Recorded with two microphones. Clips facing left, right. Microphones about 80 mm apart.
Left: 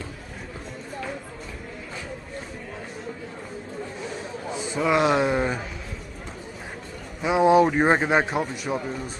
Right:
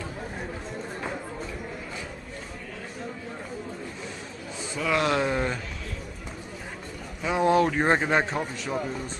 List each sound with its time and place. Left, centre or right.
4.7 s a man's voice: centre
7.2 s a man's voice: centre